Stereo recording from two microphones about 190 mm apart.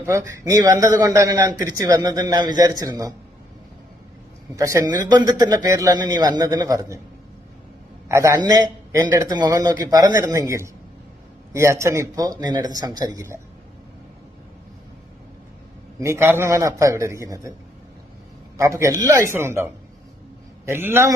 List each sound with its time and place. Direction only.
0.0 s a man's voice: 15° right (ahead or behind)
4.5 s a man's voice: 15° right (ahead or behind)
8.0 s a man's voice: 15° right (ahead or behind)
16.0 s a man's voice: 15° right (ahead or behind)
18.5 s a man's voice: 15° right (ahead or behind)
20.7 s a man's voice: 10° right (ahead or behind)